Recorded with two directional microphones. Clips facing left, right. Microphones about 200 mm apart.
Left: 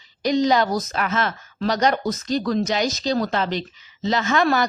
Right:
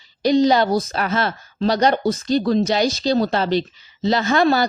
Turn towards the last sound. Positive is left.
turn(degrees=-30)  # may be behind; listen again after turning